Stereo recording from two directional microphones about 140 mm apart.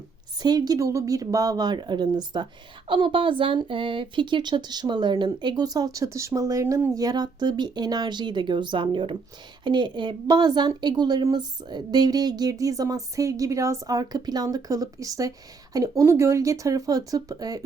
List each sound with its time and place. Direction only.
0.4 s a woman's voice: 30° right (ahead or behind)